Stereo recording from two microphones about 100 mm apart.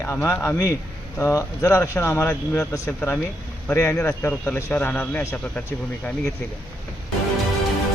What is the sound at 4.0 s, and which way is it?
Speech, 20° left (ahead or behind).